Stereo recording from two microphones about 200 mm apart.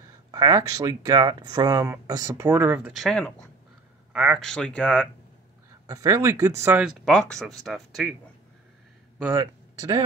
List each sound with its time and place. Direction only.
0.3 s speech: 20° right (ahead or behind)
3.1 s speech: 5° left (ahead or behind)
5.9 s speech: 15° right (ahead or behind)
7.1 s speech: centre (ahead or behind)
9.2 s speech: 15° right (ahead or behind)